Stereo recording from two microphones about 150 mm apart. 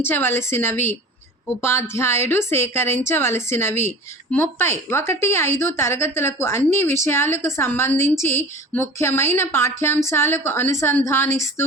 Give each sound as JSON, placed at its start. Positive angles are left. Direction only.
{"t": 0.0, "sound": "a woman's voice", "side_deg": 15}